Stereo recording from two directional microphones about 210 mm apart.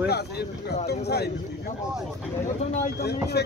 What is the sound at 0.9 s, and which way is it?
Speech, 50° left (ahead or behind).